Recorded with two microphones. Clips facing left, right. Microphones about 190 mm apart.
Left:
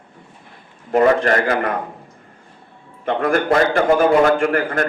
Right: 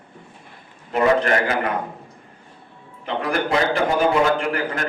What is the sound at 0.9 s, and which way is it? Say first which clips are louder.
Speech: left 3 dB; 45° left (ahead or behind).